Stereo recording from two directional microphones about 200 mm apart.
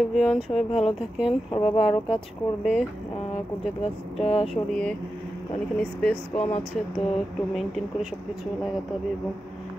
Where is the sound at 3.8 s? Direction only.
30° left (ahead or behind).